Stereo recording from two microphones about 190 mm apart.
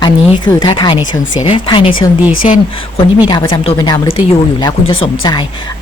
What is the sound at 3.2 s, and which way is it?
A woman's voice, 25° left (ahead or behind).